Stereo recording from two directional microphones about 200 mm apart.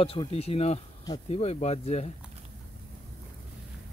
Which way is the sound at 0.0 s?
30° left (ahead or behind).